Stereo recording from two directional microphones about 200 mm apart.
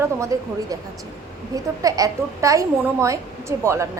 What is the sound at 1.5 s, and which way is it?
A woman's voice, 15° right (ahead or behind).